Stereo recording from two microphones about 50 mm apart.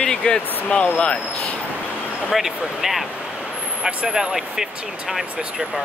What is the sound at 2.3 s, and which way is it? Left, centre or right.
Speech, centre.